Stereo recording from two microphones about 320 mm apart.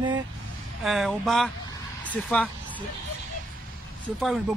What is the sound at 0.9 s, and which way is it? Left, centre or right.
Speech, centre.